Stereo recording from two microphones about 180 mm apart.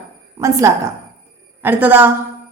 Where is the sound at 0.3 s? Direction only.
20° right (ahead or behind).